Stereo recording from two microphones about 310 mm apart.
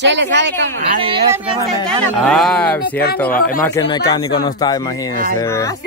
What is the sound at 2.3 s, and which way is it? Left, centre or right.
A woman's voice, centre.